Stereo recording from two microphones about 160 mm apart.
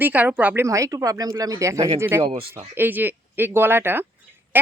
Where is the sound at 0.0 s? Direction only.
10° right (ahead or behind).